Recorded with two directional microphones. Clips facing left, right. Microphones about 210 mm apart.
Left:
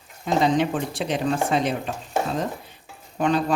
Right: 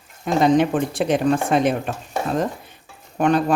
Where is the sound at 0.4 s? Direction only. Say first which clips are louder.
Right 7 dB; 50° right (ahead or behind).